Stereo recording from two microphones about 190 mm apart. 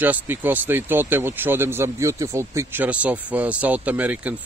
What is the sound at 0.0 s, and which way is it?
Speech, 10° right (ahead or behind).